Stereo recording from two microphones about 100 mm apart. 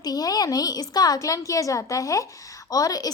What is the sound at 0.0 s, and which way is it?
A woman's voice, 40° left (ahead or behind).